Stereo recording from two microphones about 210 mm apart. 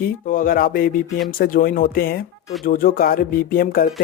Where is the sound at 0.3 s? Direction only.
40° left (ahead or behind).